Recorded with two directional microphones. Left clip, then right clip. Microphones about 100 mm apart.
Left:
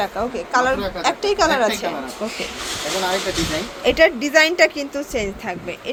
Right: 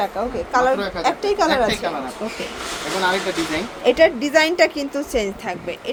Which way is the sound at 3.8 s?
5° right (ahead or behind).